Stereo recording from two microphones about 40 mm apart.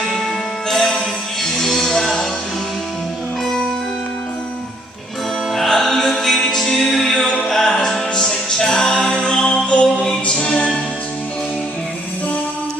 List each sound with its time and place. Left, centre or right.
0.7 s music: centre
5.5 s music: centre; by 10.7 s left